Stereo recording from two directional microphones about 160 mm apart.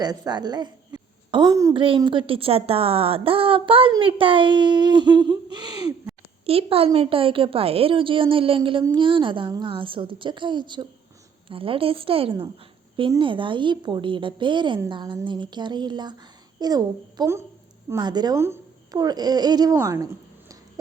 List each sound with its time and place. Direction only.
0.0 s a woman's voice: 25° right (ahead or behind)
6.4 s a woman's voice: 35° right (ahead or behind); by 20.1 s 20° right (ahead or behind)